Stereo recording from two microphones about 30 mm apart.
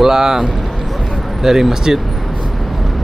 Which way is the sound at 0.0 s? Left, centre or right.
Centre.